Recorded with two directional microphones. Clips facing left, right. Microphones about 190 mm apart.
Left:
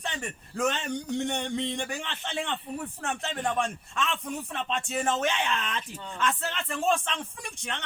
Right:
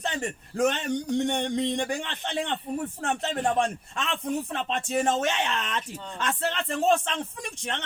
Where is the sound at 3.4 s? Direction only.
30° right (ahead or behind).